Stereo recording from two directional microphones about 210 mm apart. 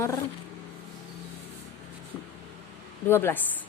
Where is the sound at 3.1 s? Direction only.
10° left (ahead or behind).